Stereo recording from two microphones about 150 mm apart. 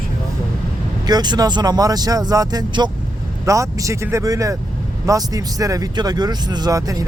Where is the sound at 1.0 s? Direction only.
30° right (ahead or behind).